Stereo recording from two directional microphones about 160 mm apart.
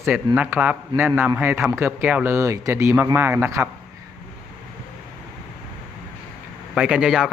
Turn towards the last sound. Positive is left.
turn(degrees=-5)  # may be behind; listen again after turning